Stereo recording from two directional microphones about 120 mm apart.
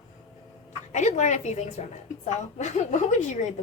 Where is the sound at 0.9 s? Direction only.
80° left.